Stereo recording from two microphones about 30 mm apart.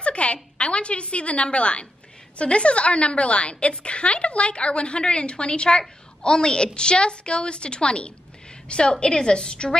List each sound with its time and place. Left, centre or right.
0.0 s a woman's voice: left